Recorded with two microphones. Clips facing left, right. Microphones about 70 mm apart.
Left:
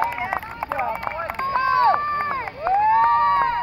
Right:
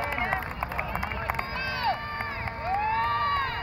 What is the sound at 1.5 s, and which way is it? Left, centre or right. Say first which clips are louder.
Run: left 15 dB; left.